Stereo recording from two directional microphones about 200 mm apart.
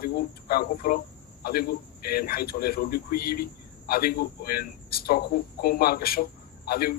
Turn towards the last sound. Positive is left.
turn(degrees=50)  # may be behind; listen again after turning